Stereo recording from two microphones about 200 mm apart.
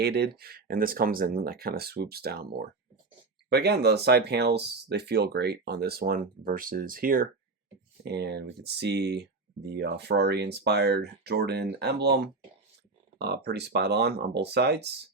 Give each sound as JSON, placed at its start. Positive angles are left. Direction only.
{"t": 0.0, "sound": "speech", "side_deg": -55}